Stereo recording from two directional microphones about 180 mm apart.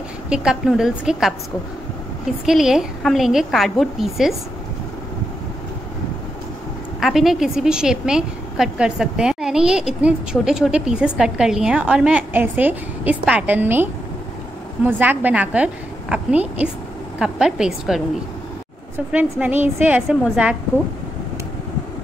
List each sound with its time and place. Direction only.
0.3 s a woman's voice: 5° right (ahead or behind)
2.4 s a woman's voice: 5° right (ahead or behind)
7.0 s a woman's voice: centre (ahead or behind)
14.9 s a woman's voice: 10° right (ahead or behind)
19.1 s a woman's voice: 10° right (ahead or behind)